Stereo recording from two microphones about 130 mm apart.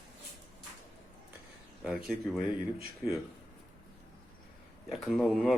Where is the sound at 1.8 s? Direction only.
5° right (ahead or behind).